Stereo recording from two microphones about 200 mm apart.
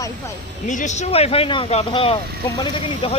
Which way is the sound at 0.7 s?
35° left (ahead or behind).